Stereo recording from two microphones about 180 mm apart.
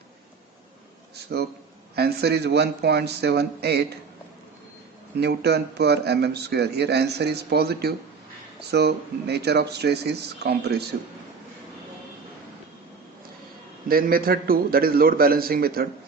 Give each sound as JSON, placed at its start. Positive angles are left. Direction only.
{"t": 1.1, "sound": "a sound", "side_deg": -65}
{"t": 2.0, "sound": "a man's voice", "side_deg": -65}
{"t": 5.2, "sound": "a man's voice", "side_deg": -65}
{"t": 13.8, "sound": "speech", "side_deg": -55}